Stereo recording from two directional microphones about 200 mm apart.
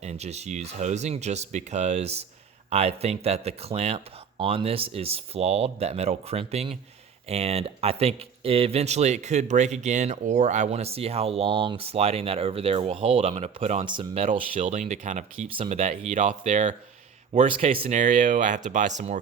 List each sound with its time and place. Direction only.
0.0 s speech: 35° right (ahead or behind)